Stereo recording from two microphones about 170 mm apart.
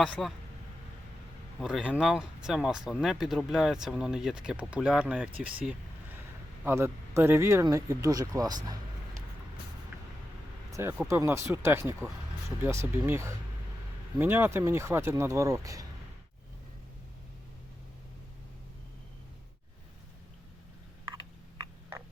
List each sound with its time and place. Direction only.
0.0 s speech: centre (ahead or behind)
1.5 s speech: centre (ahead or behind)
6.7 s speech: 15° right (ahead or behind)
10.7 s a sound: 15° right (ahead or behind)
11.1 s speech: 15° right (ahead or behind)
21.6 s a sound: 15° right (ahead or behind)